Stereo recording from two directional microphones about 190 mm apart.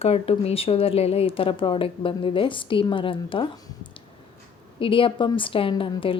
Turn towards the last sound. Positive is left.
turn(degrees=25)  # may be behind; listen again after turning